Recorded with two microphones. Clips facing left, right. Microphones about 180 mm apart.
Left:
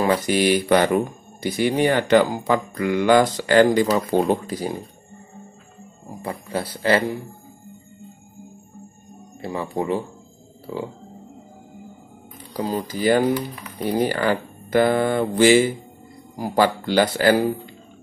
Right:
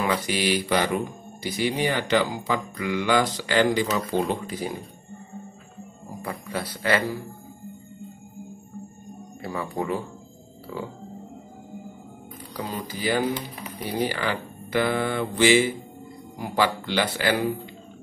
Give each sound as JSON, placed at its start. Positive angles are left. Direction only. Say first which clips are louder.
{"t": 0.0, "sound": "speech", "louder": "left 6 dB", "side_deg": 45}
{"t": 3.8, "sound": "speech", "louder": "left 5 dB", "side_deg": 35}
{"t": 6.2, "sound": "speech", "louder": "left 4 dB", "side_deg": 30}
{"t": 9.4, "sound": "speech", "louder": "left 4 dB", "side_deg": 25}
{"t": 12.5, "sound": "speech", "louder": "left 7 dB", "side_deg": 35}